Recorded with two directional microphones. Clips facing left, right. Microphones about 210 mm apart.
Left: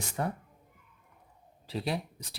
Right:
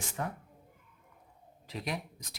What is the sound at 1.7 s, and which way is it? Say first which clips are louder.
Speech: left 4 dB; 30° left (ahead or behind).